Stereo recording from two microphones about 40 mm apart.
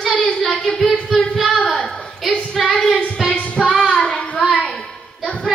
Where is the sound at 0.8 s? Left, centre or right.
Left.